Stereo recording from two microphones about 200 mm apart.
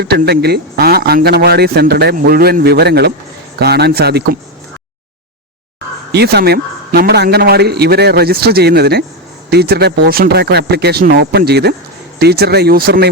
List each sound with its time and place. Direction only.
0.0 s speech: 55° right (ahead or behind)
6.1 s speech: 55° right (ahead or behind)